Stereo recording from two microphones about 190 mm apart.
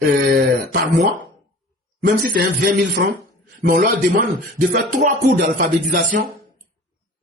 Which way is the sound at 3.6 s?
60° right (ahead or behind).